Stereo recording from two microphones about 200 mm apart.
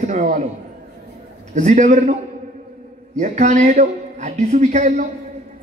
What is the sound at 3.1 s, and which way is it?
Speech, 35° right (ahead or behind).